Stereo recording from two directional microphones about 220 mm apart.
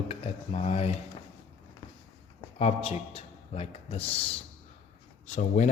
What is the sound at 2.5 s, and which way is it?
A man's voice, 30° left (ahead or behind).